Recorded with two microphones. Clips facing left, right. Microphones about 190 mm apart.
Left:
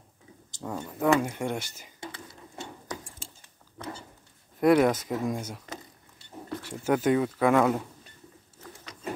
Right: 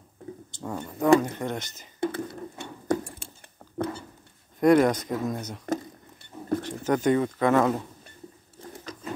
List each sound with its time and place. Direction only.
0.6 s speech: 5° left (ahead or behind)
2.0 s a sound: 55° right (ahead or behind)
4.6 s speech: 5° left (ahead or behind)
6.8 s speech: 5° left (ahead or behind)